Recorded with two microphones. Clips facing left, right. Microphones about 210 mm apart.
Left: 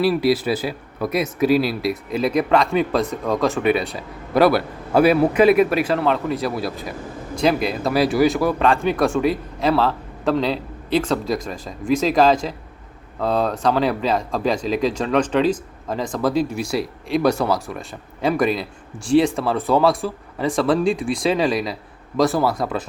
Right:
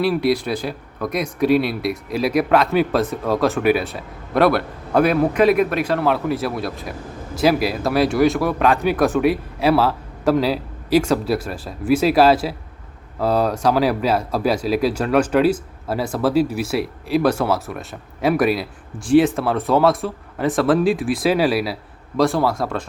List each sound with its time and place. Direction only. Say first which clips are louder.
0.0 s speech: left 1 dB; centre (ahead or behind)